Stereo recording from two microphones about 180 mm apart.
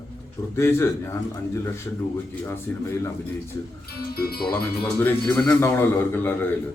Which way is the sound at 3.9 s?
60° left (ahead or behind).